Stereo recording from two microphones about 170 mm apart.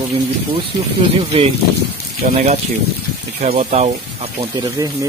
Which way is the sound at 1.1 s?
35° right (ahead or behind).